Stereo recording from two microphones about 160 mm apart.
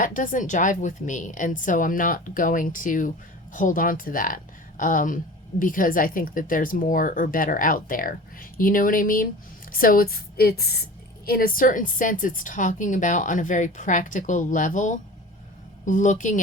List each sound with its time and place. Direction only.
0.0 s a woman's voice: 55° left (ahead or behind); by 10.8 s 80° left
11.3 s a woman's voice: 65° left (ahead or behind)